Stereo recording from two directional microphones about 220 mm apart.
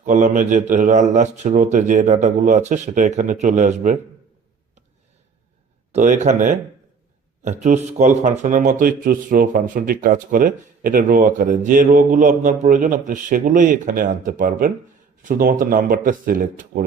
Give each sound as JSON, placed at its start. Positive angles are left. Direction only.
{"t": 0.0, "sound": "a man's voice", "side_deg": -35}
{"t": 5.9, "sound": "a man's voice", "side_deg": -35}
{"t": 7.6, "sound": "a man's voice", "side_deg": -35}